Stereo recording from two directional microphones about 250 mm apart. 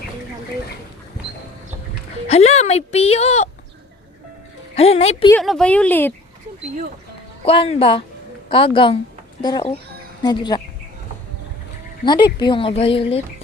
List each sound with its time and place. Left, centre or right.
2.2 s speech: left
4.7 s speech: left
5.3 s speech: centre
7.4 s a child's voice: left
12.0 s speech: centre